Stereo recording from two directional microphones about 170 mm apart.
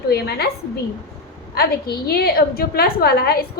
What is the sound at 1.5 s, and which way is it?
A woman's voice, 65° left (ahead or behind).